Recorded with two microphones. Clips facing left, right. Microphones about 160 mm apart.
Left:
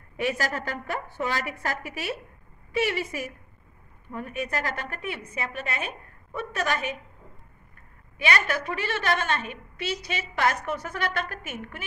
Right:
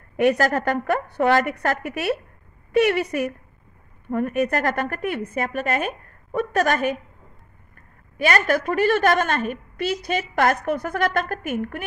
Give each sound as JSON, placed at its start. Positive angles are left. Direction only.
{"t": 0.4, "sound": "a woman's voice", "side_deg": -60}
{"t": 8.2, "sound": "a woman's voice", "side_deg": -45}